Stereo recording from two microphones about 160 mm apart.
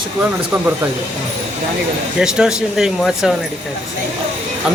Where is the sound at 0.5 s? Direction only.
15° right (ahead or behind).